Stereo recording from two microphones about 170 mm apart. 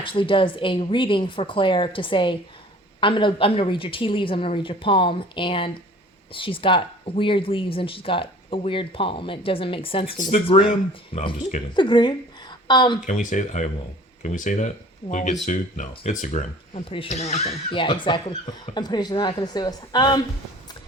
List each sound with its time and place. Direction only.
0.0 s speech: 30° left (ahead or behind)
10.2 s speech: 50° left (ahead or behind)
10.4 s a woman's voice: 35° left (ahead or behind)
13.1 s speech: 45° left (ahead or behind)
17.7 s speech: 30° left (ahead or behind)